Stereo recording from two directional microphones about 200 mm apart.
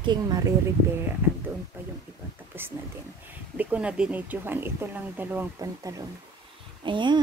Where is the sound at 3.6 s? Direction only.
5° right (ahead or behind).